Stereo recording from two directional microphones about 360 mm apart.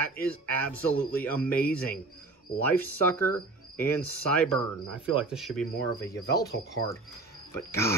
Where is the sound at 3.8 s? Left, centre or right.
Centre.